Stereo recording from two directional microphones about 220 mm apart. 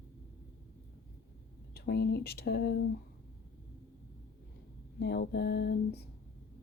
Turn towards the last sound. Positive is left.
turn(degrees=45)  # may be behind; listen again after turning